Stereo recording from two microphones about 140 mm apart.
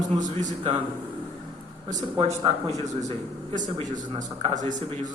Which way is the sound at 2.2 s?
40° right (ahead or behind).